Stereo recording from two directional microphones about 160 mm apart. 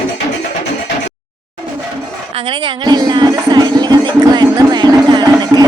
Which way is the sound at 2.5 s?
30° right (ahead or behind).